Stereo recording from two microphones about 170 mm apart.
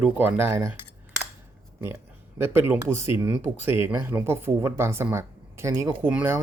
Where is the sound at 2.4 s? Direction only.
15° right (ahead or behind).